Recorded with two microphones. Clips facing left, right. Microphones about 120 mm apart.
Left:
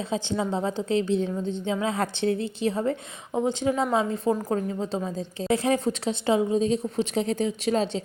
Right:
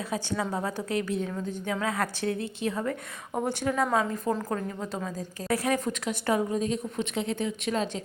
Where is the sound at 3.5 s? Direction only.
20° left (ahead or behind).